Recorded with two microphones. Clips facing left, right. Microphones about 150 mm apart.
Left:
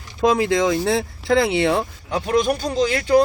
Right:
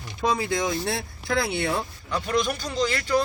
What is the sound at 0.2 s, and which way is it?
Speech, 90° left.